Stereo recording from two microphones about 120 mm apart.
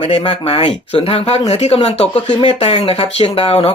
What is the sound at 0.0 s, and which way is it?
Speech, 50° left (ahead or behind).